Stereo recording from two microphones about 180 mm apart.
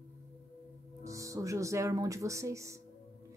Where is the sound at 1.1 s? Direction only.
20° right (ahead or behind).